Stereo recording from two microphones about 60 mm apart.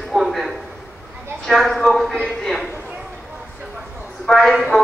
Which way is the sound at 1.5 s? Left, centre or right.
Centre.